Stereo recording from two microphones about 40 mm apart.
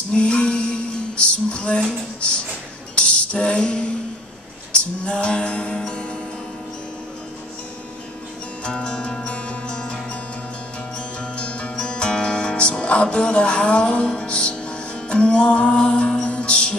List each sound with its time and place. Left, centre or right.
0.1 s music: left
8.6 s music: left
11.1 s music: left